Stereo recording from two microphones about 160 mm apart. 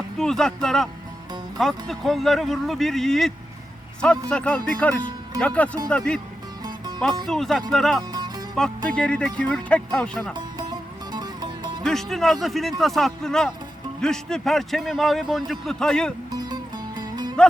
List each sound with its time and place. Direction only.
0.2 s a man's voice: 5° left (ahead or behind)
7.3 s a man's voice: centre (ahead or behind)
8.1 s music: 25° right (ahead or behind)
8.5 s a man's voice: 5° left (ahead or behind)
10.3 s music: 25° right (ahead or behind)
11.8 s a man's voice: centre (ahead or behind)
16.3 s music: 25° right (ahead or behind)